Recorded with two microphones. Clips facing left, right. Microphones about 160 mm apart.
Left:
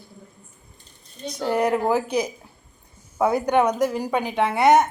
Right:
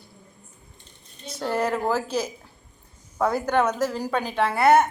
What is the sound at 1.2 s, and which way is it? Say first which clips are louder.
A woman's voice: left 3 dB; 15° left (ahead or behind).